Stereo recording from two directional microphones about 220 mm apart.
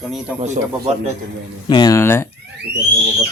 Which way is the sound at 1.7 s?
15° left (ahead or behind).